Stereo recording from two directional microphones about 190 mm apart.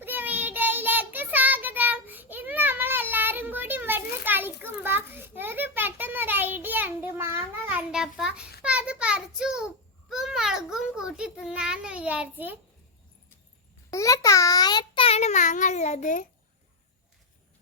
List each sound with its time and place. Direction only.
0.0 s child singing: 10° right (ahead or behind)
8.6 s a sound: 5° right (ahead or behind)
13.9 s child singing: 15° left (ahead or behind); by 16.2 s 40° left (ahead or behind)